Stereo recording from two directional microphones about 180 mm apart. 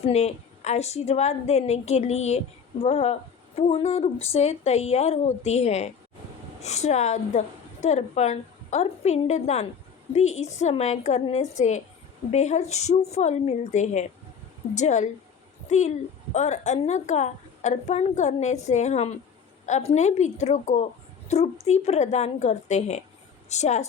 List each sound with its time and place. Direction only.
0.0 s a woman's voice: 35° left (ahead or behind)